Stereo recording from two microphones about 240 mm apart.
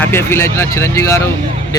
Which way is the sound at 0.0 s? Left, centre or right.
Centre.